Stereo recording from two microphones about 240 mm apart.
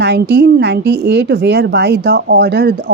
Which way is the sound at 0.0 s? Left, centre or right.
Right.